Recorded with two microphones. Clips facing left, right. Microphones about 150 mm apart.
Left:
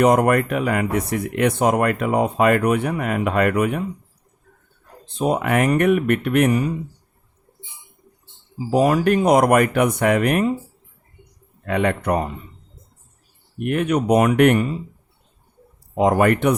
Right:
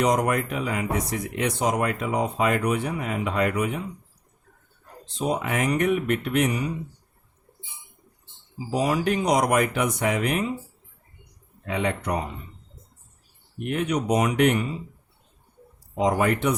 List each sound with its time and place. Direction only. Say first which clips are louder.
0.0 s speech: left 7 dB; 60° left (ahead or behind)
5.0 s speech: left 6 dB; 55° left (ahead or behind)
8.7 s speech: left 7 dB; 55° left (ahead or behind)
11.6 s speech: left 6 dB; 60° left (ahead or behind)
13.6 s speech: left 5 dB; 60° left (ahead or behind)
16.0 s speech: left 6 dB; 60° left (ahead or behind)